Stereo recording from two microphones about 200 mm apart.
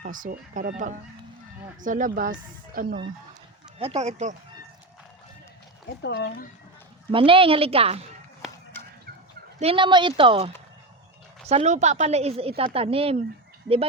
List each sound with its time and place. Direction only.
0.0 s a woman's voice: 45° right (ahead or behind)
3.8 s a woman's voice: 30° right (ahead or behind)
6.0 s speech: 60° left (ahead or behind)
7.1 s speech: 25° right (ahead or behind)
9.6 s a woman's voice: 25° right (ahead or behind)